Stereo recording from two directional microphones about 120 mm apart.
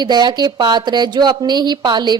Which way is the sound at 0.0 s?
35° right (ahead or behind).